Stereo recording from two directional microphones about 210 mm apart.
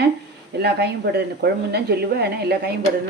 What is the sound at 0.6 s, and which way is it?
A woman's voice, 50° right (ahead or behind).